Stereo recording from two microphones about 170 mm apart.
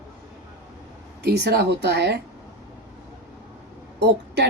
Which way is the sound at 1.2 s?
85° right.